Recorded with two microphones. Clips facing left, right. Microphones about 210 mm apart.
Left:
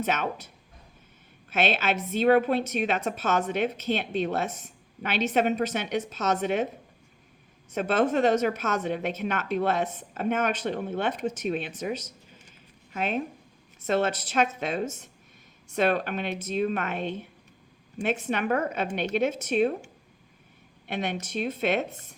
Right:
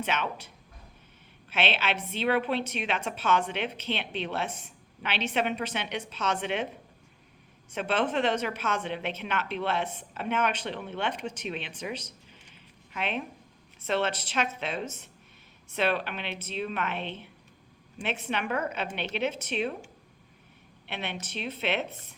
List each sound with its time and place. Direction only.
0.0 s a woman's voice: 45° left (ahead or behind)
7.7 s a woman's voice: 45° left (ahead or behind)
20.8 s a woman's voice: 45° left (ahead or behind)